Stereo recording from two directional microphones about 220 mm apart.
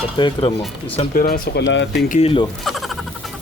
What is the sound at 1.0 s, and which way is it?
Speech, 40° left (ahead or behind).